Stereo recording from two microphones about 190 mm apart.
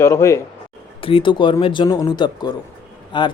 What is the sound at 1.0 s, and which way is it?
Speech, 30° left (ahead or behind).